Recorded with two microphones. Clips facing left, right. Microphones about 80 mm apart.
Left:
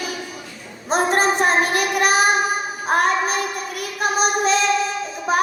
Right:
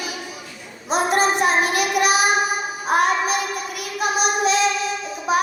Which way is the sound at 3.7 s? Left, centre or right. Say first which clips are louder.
Left 2 dB; left.